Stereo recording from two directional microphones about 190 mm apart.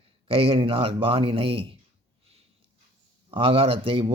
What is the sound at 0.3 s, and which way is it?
A man's voice, 30° right (ahead or behind).